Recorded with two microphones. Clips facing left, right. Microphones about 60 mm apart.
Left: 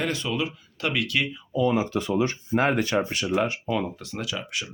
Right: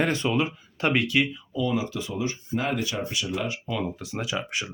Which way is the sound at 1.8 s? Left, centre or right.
Left.